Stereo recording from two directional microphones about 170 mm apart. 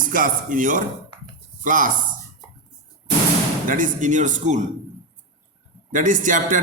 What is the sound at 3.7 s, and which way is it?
Speech, 50° right (ahead or behind).